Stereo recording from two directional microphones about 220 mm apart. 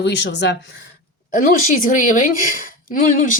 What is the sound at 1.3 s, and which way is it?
A woman's voice, 35° left (ahead or behind).